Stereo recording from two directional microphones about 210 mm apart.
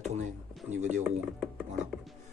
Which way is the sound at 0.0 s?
35° right (ahead or behind).